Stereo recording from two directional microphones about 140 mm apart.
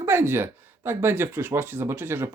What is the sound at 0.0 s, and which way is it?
Speech, 15° right (ahead or behind).